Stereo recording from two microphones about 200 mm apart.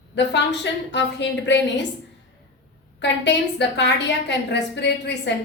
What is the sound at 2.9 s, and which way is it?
A woman's voice, 60° left (ahead or behind).